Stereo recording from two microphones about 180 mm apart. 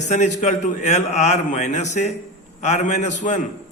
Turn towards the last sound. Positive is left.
turn(degrees=40)  # may be behind; listen again after turning